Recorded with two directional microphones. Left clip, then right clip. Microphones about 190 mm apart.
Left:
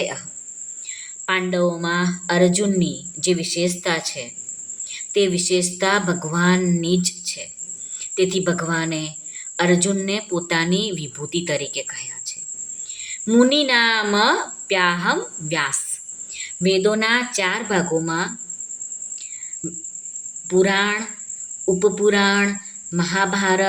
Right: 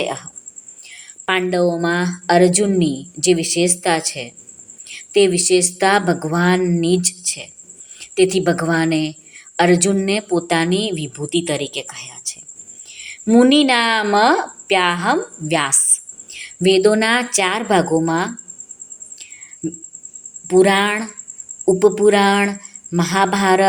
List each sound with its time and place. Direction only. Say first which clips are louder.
0.0 s a woman's voice: right 3 dB; 25° right (ahead or behind)
0.9 s a sound: right 3 dB; 25° right (ahead or behind)
1.7 s a woman's voice: right 3 dB; 25° right (ahead or behind)
19.6 s a woman's voice: right 8 dB; 25° right (ahead or behind)